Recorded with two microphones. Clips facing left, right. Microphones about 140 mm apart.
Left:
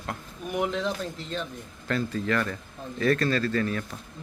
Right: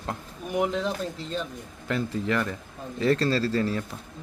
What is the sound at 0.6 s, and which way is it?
Speech, 5° right (ahead or behind).